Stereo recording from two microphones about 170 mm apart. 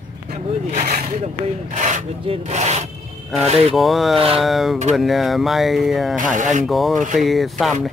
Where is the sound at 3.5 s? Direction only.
35° right (ahead or behind).